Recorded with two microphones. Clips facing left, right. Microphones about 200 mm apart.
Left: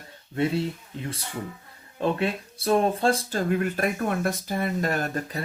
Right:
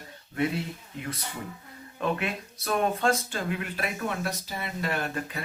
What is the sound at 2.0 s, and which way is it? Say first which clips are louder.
Speech: left 4 dB; 30° left (ahead or behind).